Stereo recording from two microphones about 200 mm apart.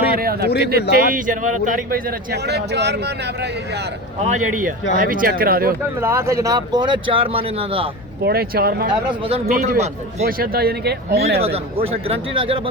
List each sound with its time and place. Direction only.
0.1 s a sound: 50° right (ahead or behind)
0.6 s a man's voice: 50° right (ahead or behind)
4.4 s a man's voice: 40° right (ahead or behind)
6.0 s speech: 15° right (ahead or behind)
8.2 s a man's voice: 50° right (ahead or behind)
8.9 s a man's voice: 25° right (ahead or behind)
10.3 s a man's voice: 50° right (ahead or behind)
11.4 s speech: 30° right (ahead or behind)